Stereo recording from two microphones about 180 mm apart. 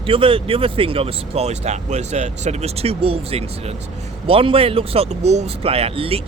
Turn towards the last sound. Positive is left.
turn(degrees=-30)  # may be behind; listen again after turning